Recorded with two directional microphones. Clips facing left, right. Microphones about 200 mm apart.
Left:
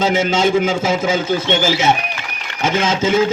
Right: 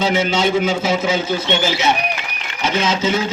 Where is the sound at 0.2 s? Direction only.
45° left (ahead or behind).